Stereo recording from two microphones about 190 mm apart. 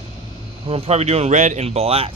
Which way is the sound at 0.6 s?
30° right (ahead or behind).